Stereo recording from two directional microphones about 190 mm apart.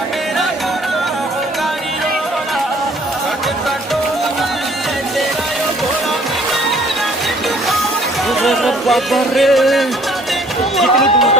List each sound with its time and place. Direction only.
8.4 s music: centre (ahead or behind)
10.8 s speech: centre (ahead or behind)